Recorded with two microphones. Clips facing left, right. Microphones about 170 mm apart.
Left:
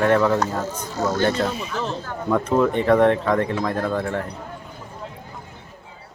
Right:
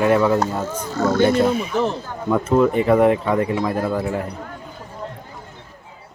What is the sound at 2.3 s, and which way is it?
Speech, 5° right (ahead or behind).